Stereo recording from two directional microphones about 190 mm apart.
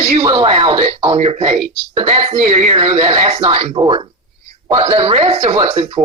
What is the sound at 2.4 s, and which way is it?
Speech, 40° right (ahead or behind).